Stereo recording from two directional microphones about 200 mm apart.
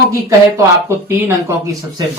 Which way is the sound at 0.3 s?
15° right (ahead or behind).